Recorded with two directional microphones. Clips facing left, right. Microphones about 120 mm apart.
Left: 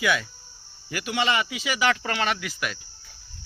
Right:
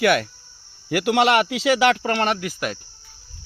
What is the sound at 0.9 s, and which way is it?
Speech, 70° right (ahead or behind).